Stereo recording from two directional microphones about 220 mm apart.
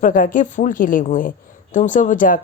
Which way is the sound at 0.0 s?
40° left (ahead or behind).